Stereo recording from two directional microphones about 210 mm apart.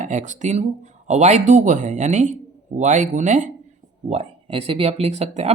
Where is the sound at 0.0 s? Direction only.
35° right (ahead or behind).